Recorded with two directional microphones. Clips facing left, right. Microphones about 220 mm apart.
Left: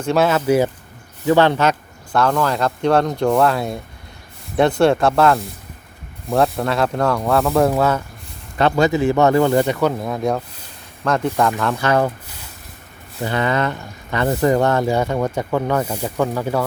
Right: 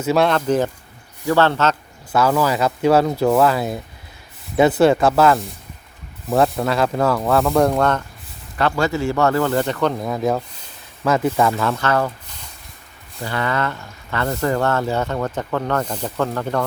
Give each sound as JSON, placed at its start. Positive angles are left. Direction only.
{"t": 0.0, "sound": "speech", "side_deg": 0}
{"t": 2.1, "sound": "speech", "side_deg": -5}
{"t": 8.5, "sound": "speech", "side_deg": 20}
{"t": 10.0, "sound": "speech", "side_deg": 0}
{"t": 11.7, "sound": "speech", "side_deg": 15}
{"t": 13.2, "sound": "speech", "side_deg": 20}